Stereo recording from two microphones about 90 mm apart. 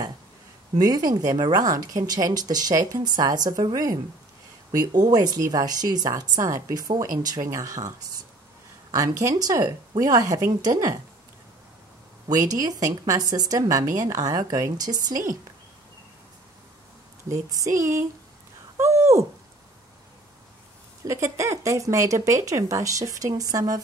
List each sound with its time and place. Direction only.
0.7 s speech: 45° right (ahead or behind)
7.4 s speech: 35° right (ahead or behind)
8.9 s speech: 40° right (ahead or behind)
12.3 s speech: 45° right (ahead or behind)
17.3 s speech: 35° right (ahead or behind)
18.8 s a sound: 35° right (ahead or behind)
21.0 s speech: 35° right (ahead or behind)